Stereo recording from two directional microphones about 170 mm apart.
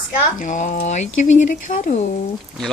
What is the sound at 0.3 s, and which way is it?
Speech, 50° left (ahead or behind).